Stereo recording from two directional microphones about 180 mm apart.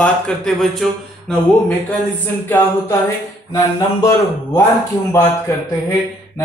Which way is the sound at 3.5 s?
20° left (ahead or behind).